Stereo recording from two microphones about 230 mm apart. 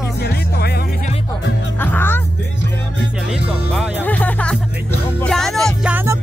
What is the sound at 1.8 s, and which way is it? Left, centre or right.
Music, centre.